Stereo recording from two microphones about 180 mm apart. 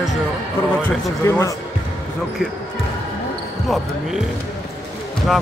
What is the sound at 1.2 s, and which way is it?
Speech, 15° left (ahead or behind).